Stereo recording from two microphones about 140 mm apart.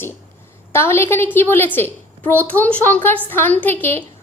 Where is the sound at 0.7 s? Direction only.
15° left (ahead or behind).